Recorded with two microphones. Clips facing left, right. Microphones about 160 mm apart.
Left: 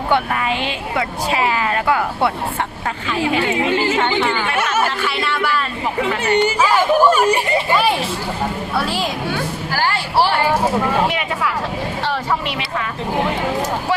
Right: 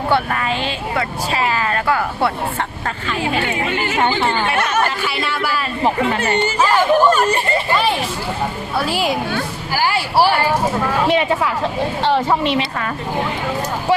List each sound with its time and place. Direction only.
0.1 s speech: 15° left (ahead or behind)
3.4 s a woman's voice: 30° left (ahead or behind)
4.5 s speech: 10° left (ahead or behind)
5.0 s speech: 5° right (ahead or behind)
6.1 s speech: 15° left (ahead or behind)
8.9 s speech: 10° right (ahead or behind)
11.1 s speech: 30° right (ahead or behind)